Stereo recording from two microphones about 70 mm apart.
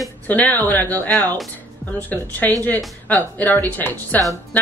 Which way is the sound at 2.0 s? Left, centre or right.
Left.